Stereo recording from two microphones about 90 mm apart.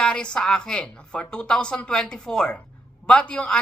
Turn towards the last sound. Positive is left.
turn(degrees=10)  # may be behind; listen again after turning